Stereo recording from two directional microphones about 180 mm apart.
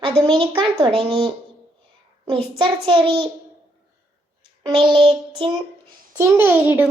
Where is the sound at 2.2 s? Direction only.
25° right (ahead or behind).